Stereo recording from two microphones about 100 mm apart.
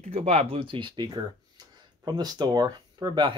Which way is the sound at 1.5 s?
45° right (ahead or behind).